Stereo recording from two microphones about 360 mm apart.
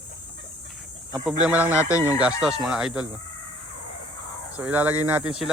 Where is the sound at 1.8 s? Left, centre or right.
Centre.